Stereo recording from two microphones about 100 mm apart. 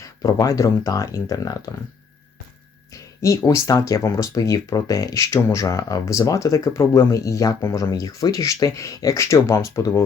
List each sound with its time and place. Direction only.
0.0 s speech: 35° left (ahead or behind)
2.9 s speech: 35° left (ahead or behind)